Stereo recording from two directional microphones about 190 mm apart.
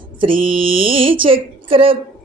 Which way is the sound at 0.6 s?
30° right (ahead or behind).